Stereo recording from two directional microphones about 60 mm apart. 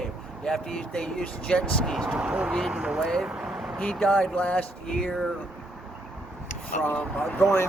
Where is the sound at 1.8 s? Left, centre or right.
Centre.